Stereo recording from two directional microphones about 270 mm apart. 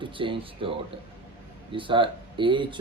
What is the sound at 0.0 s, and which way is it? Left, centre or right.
Speech, centre.